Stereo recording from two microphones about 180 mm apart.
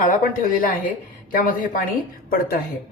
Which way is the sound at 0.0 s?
50° left (ahead or behind).